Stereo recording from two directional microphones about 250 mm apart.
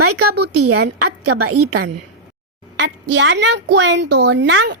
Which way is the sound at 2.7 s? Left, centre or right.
Right.